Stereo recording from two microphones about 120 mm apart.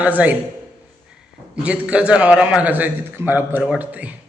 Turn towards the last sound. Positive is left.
turn(degrees=-10)  # may be behind; listen again after turning